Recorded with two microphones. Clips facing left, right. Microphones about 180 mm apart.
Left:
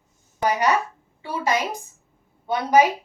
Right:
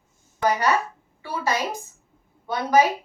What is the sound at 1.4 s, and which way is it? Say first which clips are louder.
Speech: left 2 dB; 15° left (ahead or behind).